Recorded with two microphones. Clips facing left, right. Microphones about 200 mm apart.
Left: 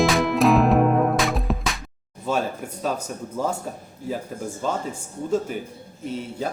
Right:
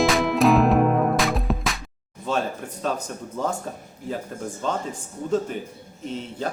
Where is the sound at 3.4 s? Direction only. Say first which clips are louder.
Left 1 dB; 5° left (ahead or behind).